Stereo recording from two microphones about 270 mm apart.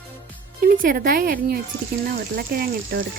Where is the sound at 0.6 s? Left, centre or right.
Right.